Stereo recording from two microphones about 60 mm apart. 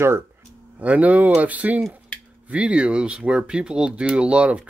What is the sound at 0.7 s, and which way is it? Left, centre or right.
Speech, right.